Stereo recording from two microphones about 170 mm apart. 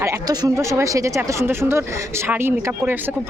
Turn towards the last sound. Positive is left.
turn(degrees=-10)  # may be behind; listen again after turning